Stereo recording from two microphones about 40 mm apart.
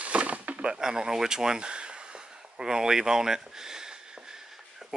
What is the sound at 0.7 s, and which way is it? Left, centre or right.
Speech, centre.